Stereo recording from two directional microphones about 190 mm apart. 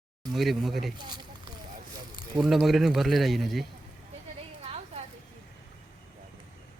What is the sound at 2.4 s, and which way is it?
Speech, centre (ahead or behind).